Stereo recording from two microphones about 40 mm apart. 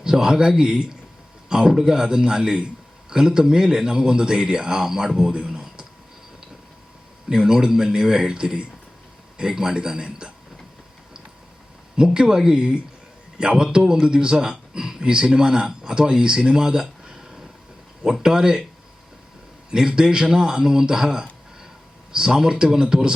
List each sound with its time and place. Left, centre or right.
0.0 s speech: centre
5.5 s a sound: centre
7.3 s speech: centre
11.9 s speech: right
19.7 s speech: centre